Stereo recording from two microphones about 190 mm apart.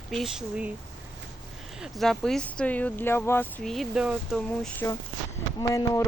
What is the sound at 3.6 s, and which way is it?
Speech, centre (ahead or behind).